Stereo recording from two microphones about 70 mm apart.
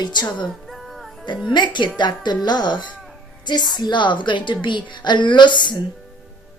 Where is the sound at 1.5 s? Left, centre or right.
Left.